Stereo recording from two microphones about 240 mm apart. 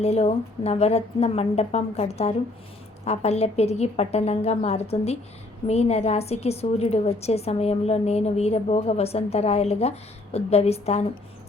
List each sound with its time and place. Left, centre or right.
0.0 s a woman's voice: left